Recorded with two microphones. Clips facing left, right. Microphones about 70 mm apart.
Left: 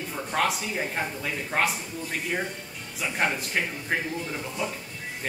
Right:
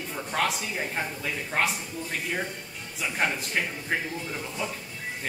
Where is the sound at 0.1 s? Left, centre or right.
Centre.